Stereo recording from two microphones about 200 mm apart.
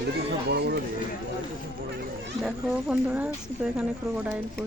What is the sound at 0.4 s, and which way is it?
Speech, 55° right (ahead or behind).